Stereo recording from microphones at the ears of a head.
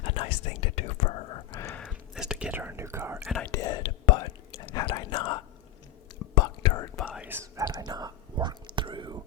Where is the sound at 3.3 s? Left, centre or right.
Left.